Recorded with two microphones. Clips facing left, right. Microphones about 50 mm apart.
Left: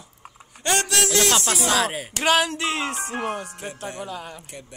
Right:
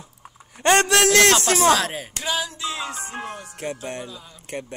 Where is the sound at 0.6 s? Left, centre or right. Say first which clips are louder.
Right 6 dB; right.